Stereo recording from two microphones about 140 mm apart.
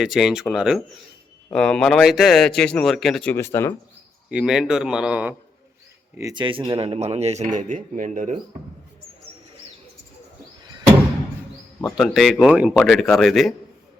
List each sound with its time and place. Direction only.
0.0 s a man's voice: centre (ahead or behind)
3.2 s speech: 15° left (ahead or behind)
4.3 s a man's voice: 5° right (ahead or behind)
6.3 s speech: 35° right (ahead or behind); by 8.4 s 65° right (ahead or behind)
11.9 s a man's voice: centre (ahead or behind)